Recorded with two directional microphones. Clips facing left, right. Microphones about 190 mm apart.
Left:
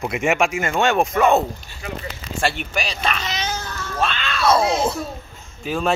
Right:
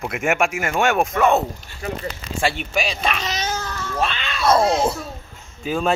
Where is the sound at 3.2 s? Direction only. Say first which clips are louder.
Right 1 dB; 40° right (ahead or behind).